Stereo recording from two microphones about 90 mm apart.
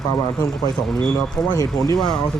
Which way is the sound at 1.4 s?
40° left (ahead or behind).